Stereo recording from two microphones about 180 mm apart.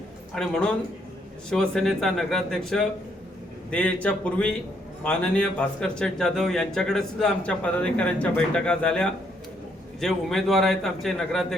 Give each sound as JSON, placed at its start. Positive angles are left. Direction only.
{"t": 0.3, "sound": "a man's voice", "side_deg": 0}